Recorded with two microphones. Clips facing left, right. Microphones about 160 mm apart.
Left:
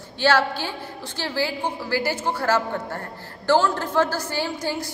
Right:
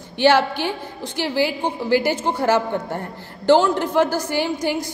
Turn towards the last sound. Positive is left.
turn(degrees=-15)  # may be behind; listen again after turning